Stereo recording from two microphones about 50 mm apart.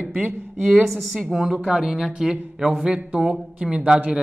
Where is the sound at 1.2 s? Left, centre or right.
Centre.